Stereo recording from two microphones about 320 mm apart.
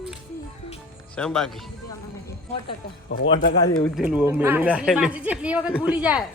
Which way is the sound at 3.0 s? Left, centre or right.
Left.